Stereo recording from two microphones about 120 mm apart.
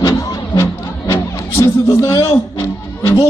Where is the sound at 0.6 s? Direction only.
25° left (ahead or behind).